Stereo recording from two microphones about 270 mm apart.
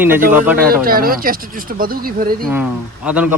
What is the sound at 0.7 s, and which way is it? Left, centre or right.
Speech, right.